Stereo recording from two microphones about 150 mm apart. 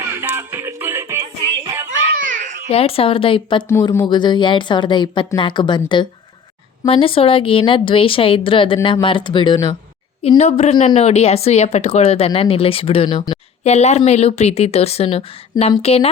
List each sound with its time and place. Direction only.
0.0 s music: 15° right (ahead or behind)
2.1 s children playing: 60° right (ahead or behind)
2.6 s a woman's voice: 40° left (ahead or behind)
6.8 s a woman's voice: 40° left (ahead or behind)
10.2 s a woman's voice: 45° left (ahead or behind)